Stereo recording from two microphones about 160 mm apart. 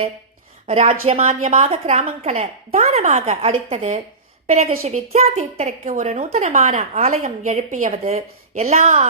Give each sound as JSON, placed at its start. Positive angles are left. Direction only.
{"t": 0.7, "sound": "a woman's voice", "side_deg": -40}